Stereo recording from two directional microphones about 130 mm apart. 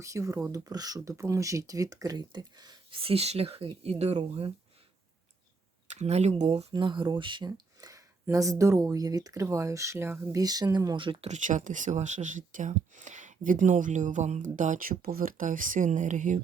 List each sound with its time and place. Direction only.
0.0 s speech: 25° right (ahead or behind)
2.9 s speech: 45° right (ahead or behind)
4.2 s speech: 45° right (ahead or behind)
5.9 s speech: 60° right (ahead or behind); by 11.3 s 40° right (ahead or behind)
11.3 s speech: 70° right (ahead or behind)